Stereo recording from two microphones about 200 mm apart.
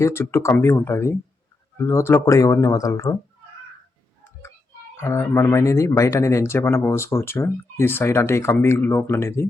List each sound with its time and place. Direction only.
0.0 s speech: 15° left (ahead or behind)
4.9 s speech: 15° left (ahead or behind)